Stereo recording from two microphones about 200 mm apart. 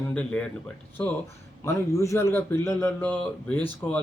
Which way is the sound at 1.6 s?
15° left (ahead or behind).